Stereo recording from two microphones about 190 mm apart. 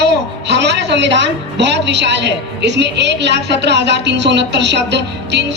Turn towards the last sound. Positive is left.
turn(degrees=-65)  # may be behind; listen again after turning